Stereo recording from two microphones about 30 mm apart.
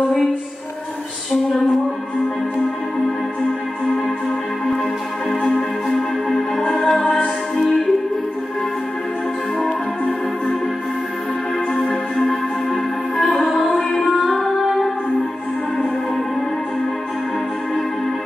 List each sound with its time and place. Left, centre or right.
5.5 s music: centre
11.9 s music: centre